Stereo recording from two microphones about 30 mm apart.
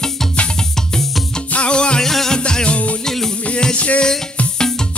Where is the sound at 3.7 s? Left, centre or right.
Left.